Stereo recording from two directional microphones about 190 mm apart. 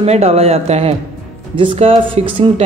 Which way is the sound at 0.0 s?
35° right (ahead or behind).